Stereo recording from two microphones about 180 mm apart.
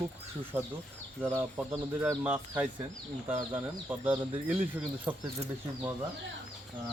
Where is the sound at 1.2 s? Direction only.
10° right (ahead or behind).